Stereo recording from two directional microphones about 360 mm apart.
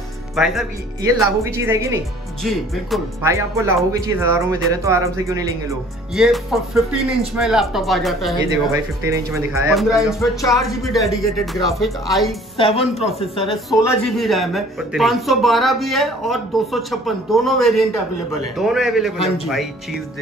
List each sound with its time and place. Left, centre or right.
0.4 s speech: centre
12.5 s speech: centre
13.4 s speech: centre